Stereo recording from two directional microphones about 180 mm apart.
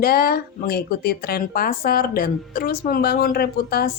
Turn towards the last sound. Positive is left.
turn(degrees=60)  # may be behind; listen again after turning